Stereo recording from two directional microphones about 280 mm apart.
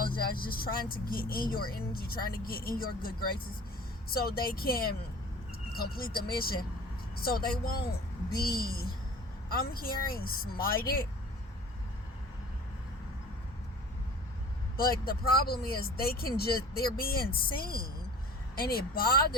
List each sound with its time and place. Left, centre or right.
0.2 s speech: left
14.8 s speech: left